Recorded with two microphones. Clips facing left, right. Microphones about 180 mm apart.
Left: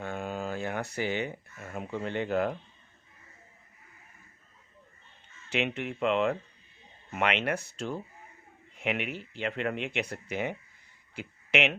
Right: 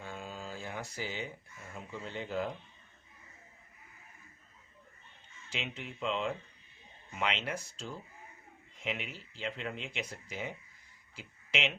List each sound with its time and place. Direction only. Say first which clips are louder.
0.0 s speech: left 9 dB; 65° left (ahead or behind)
5.5 s speech: left 10 dB; 65° left (ahead or behind)